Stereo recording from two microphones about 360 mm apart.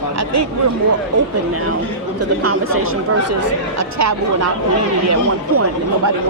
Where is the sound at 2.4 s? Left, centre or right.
Right.